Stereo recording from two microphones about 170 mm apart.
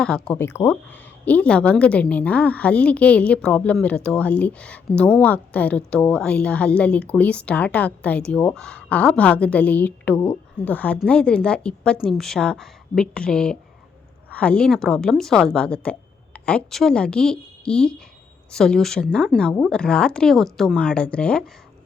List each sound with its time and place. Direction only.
0.0 s a woman's voice: 5° left (ahead or behind)